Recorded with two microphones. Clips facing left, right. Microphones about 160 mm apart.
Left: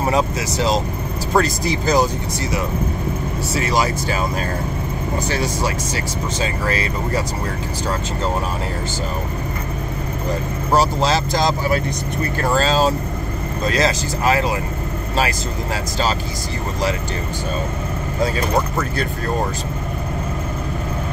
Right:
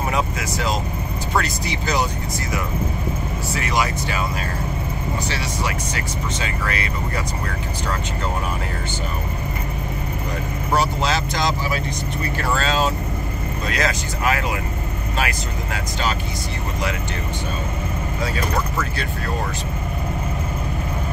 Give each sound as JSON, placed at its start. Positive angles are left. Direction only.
{"t": 1.3, "sound": "speech", "side_deg": 40}
{"t": 3.5, "sound": "speech", "side_deg": 35}
{"t": 5.3, "sound": "speech", "side_deg": 45}
{"t": 10.7, "sound": "speech", "side_deg": 35}